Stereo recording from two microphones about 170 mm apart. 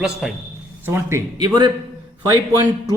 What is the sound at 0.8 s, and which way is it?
Speech, 15° right (ahead or behind).